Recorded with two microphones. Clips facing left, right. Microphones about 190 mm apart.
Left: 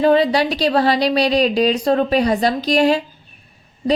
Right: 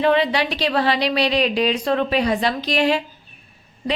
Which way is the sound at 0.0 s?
40° left (ahead or behind).